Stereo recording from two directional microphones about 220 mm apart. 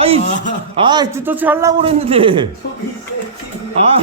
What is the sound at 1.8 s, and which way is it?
Speech, 25° right (ahead or behind).